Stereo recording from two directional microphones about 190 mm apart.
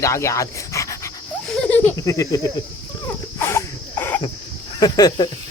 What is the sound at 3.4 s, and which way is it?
Cough, 15° left (ahead or behind).